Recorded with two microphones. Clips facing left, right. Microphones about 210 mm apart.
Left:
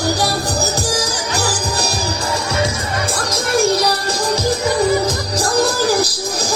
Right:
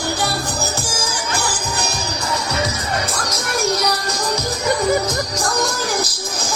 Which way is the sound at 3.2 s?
30° left (ahead or behind).